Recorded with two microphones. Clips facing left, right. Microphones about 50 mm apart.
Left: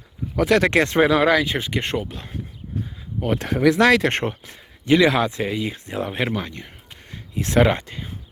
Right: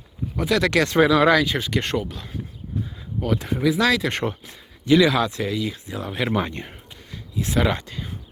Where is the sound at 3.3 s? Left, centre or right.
Left.